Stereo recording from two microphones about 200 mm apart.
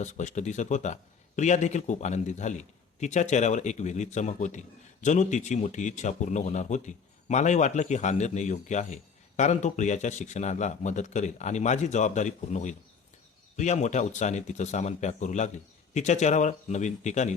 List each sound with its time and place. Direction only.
0.0 s a man's voice: 35° left (ahead or behind)